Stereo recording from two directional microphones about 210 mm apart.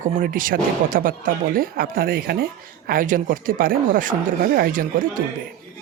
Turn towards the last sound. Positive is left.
turn(degrees=-40)  # may be behind; listen again after turning